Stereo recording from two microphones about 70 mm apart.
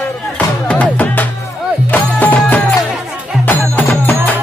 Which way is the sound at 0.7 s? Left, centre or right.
Left.